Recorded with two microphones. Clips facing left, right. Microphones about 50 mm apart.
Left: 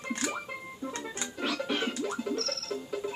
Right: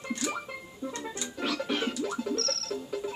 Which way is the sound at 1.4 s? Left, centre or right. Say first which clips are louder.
Right 1 dB; centre.